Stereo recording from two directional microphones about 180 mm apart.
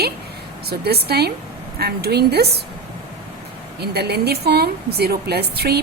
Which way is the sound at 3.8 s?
65° right (ahead or behind).